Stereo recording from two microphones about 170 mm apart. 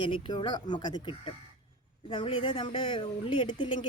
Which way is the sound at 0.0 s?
30° left (ahead or behind).